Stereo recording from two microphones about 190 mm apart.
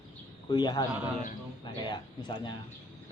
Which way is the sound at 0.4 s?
20° left (ahead or behind).